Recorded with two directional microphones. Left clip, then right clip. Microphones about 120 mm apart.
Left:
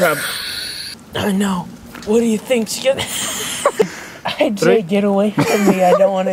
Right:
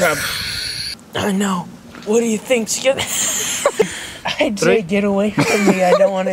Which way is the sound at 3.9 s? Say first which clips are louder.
Right 3 dB; 20° right (ahead or behind).